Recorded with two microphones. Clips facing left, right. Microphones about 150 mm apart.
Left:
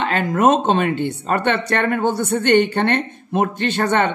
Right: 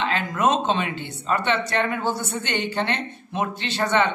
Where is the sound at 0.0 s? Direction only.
50° left (ahead or behind).